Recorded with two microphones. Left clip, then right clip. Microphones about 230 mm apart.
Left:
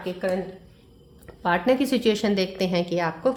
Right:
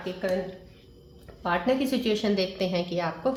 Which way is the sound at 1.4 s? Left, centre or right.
Left.